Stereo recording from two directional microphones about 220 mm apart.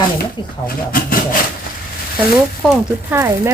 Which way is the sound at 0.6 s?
40° left (ahead or behind).